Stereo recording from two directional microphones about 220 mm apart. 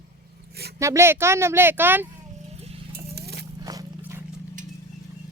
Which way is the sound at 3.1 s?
45° right (ahead or behind).